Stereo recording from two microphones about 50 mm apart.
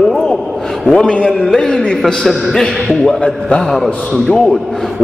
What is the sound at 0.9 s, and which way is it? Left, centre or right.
Speech, left.